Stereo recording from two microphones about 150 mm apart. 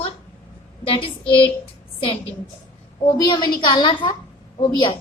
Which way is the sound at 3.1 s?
30° left (ahead or behind).